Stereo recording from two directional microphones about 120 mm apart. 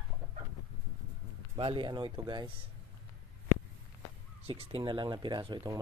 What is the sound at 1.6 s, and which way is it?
Speech, 45° right (ahead or behind).